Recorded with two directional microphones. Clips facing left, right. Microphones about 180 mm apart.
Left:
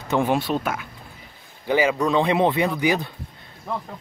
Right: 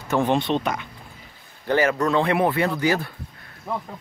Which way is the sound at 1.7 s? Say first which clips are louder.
Even; 10° left (ahead or behind).